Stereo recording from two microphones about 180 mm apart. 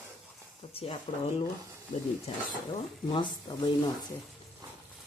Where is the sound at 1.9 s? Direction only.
45° left (ahead or behind).